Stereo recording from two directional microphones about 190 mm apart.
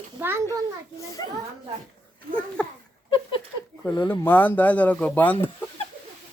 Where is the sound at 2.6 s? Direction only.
5° left (ahead or behind).